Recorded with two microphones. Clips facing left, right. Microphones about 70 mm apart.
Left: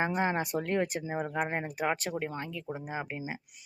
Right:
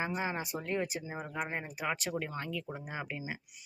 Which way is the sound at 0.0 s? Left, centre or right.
Left.